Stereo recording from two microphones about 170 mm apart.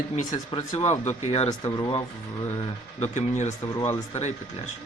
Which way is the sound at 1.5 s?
20° left (ahead or behind).